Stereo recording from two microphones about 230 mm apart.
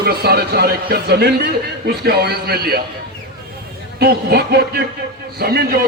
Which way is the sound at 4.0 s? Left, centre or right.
Right.